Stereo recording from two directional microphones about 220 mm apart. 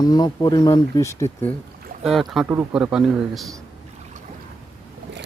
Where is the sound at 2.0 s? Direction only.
Centre (ahead or behind).